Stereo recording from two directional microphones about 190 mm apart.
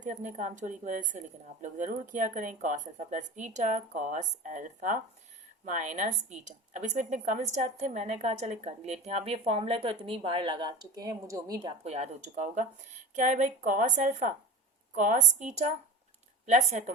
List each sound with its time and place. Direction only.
0.0 s a woman's voice: 40° right (ahead or behind); by 11.6 s 20° right (ahead or behind)
11.6 s a woman's voice: 35° right (ahead or behind)